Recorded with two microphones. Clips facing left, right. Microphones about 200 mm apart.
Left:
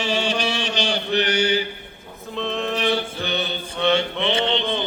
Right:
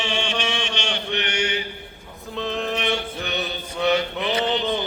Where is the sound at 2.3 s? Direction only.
Centre (ahead or behind).